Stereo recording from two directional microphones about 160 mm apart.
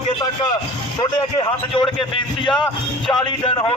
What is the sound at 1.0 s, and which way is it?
Speech, 30° left (ahead or behind).